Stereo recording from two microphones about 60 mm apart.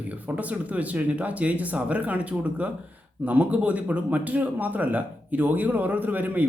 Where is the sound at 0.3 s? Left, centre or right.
Right.